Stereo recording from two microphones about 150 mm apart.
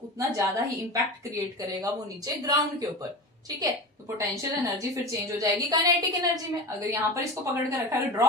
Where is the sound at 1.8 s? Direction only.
25° right (ahead or behind).